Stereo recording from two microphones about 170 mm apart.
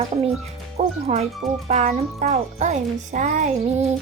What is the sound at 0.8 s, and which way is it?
Speech, 40° right (ahead or behind).